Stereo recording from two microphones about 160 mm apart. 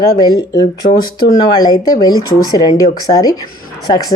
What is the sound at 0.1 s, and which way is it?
A woman's voice, 25° left (ahead or behind).